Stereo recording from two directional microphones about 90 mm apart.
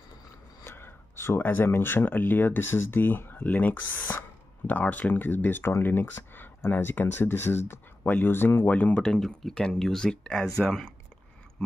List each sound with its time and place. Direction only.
0.7 s speech: 25° left (ahead or behind); by 10.9 s 10° left (ahead or behind)